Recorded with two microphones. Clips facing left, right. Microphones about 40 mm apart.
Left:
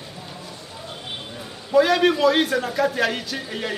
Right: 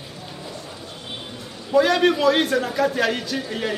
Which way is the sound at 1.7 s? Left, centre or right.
Centre.